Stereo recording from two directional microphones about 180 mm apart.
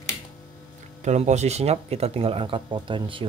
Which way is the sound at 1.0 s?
40° right (ahead or behind).